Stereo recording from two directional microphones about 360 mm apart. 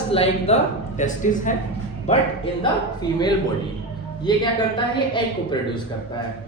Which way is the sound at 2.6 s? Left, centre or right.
Centre.